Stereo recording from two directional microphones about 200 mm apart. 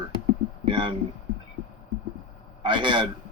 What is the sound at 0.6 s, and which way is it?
Speech, 25° right (ahead or behind).